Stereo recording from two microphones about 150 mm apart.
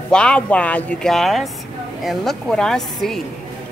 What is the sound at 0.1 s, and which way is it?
Speech, 5° left (ahead or behind).